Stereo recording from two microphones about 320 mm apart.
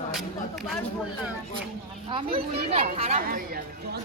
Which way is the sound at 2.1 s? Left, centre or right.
Centre.